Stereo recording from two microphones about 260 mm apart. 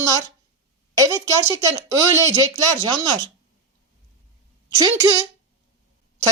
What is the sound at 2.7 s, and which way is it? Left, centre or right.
Speech, centre.